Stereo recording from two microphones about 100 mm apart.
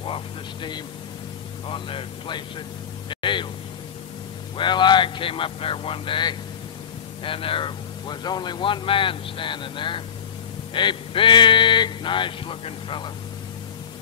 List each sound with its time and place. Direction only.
0.0 s vehicle: 60° left (ahead or behind)
1.7 s speech: 60° left (ahead or behind)
3.1 s a sound: 55° left (ahead or behind)
4.6 s speech: 50° left (ahead or behind)